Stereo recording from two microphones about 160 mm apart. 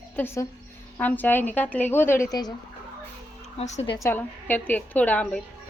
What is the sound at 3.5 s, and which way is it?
Speech, 45° left (ahead or behind).